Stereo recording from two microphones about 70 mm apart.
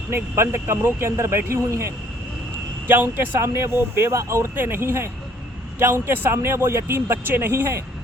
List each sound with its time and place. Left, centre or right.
0.1 s speech: right
2.8 s speech: right